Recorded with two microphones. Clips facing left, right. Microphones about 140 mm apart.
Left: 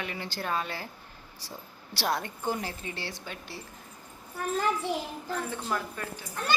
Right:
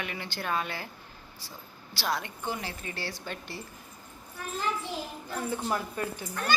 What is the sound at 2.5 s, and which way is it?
Speech, 45° left (ahead or behind).